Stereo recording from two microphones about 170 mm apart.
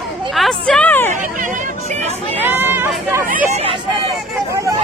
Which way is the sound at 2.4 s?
10° right (ahead or behind).